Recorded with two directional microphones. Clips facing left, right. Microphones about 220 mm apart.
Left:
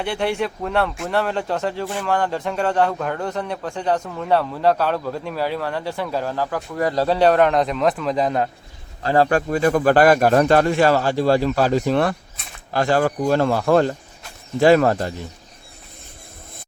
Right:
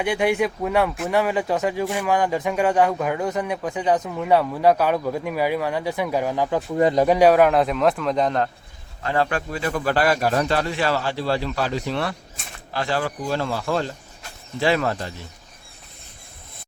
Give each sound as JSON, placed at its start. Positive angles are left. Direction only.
{"t": 0.0, "sound": "a man's voice", "side_deg": -10}
{"t": 9.0, "sound": "a man's voice", "side_deg": 40}